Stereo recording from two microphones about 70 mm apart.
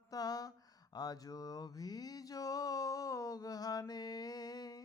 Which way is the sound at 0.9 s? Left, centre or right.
Left.